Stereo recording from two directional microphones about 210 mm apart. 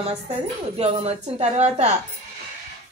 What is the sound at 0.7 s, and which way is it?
A woman's voice, 30° right (ahead or behind).